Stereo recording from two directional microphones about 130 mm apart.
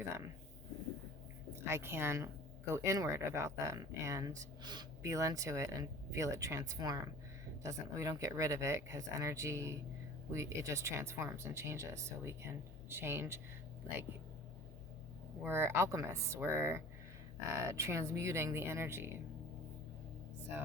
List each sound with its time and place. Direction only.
1.6 s speech: 20° right (ahead or behind)
15.4 s speech: 15° right (ahead or behind)